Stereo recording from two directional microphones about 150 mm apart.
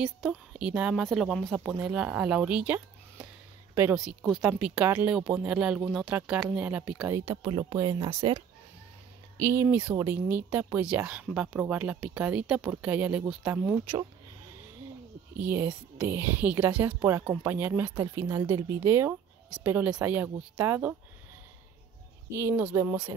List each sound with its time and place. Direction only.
0.0 s speech: 5° right (ahead or behind)
7.4 s speech: 30° right (ahead or behind)
8.1 s speech: 40° right (ahead or behind)
9.4 s speech: 20° right (ahead or behind)
15.4 s speech: 15° right (ahead or behind)
22.3 s speech: 15° right (ahead or behind)